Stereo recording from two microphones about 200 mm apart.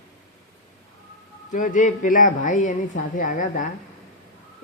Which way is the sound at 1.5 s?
40° left (ahead or behind).